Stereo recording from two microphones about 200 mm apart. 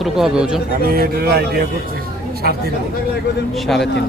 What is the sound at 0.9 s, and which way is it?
Speech, 50° right (ahead or behind).